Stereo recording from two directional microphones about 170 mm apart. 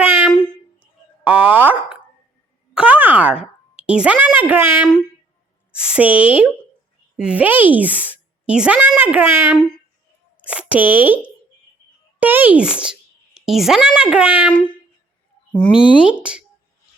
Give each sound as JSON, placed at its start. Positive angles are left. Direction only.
{"t": 0.0, "sound": "a sound", "side_deg": -10}
{"t": 1.2, "sound": "plop", "side_deg": -10}
{"t": 2.7, "sound": "a sound", "side_deg": -10}
{"t": 4.4, "sound": "speech", "side_deg": -10}
{"t": 12.2, "sound": "a child's voice", "side_deg": -10}
{"t": 15.8, "sound": "speech", "side_deg": 30}
{"t": 16.1, "sound": "speech", "side_deg": -5}